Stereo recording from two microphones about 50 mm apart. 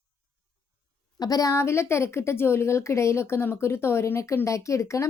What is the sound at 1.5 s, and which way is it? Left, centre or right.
A woman's voice, left.